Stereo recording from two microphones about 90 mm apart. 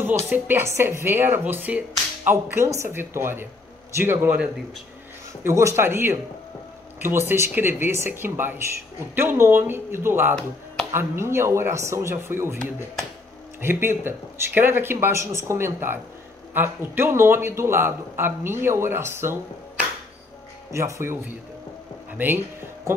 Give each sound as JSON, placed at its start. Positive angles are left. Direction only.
{"t": 0.3, "sound": "a man's voice", "side_deg": -25}
{"t": 2.5, "sound": "a man's voice", "side_deg": -35}
{"t": 5.4, "sound": "a man's voice", "side_deg": -30}
{"t": 20.7, "sound": "speech", "side_deg": -30}